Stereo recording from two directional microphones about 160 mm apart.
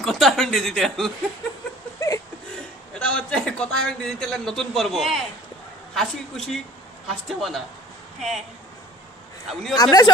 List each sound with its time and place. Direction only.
0.0 s speech: centre (ahead or behind)
2.0 s a sound: 20° left (ahead or behind)
2.9 s a man's voice: 5° left (ahead or behind)
9.5 s a man's voice: centre (ahead or behind)
9.8 s speech: 25° left (ahead or behind)